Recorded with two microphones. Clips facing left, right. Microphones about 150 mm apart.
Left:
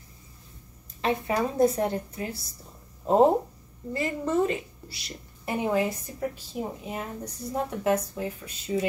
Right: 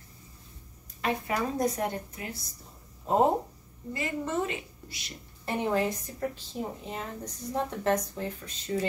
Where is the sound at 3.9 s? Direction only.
35° left (ahead or behind).